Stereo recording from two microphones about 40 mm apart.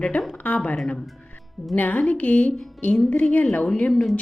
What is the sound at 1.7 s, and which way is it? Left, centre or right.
A woman's voice, left.